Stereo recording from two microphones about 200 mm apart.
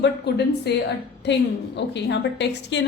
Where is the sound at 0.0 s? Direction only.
55° left (ahead or behind).